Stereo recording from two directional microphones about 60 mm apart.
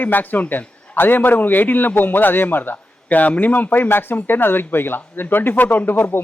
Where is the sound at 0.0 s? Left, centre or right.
Left.